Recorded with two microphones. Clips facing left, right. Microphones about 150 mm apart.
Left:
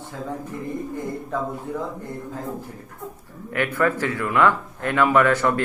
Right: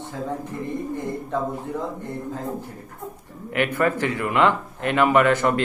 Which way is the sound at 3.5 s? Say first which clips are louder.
Even; 15° right (ahead or behind).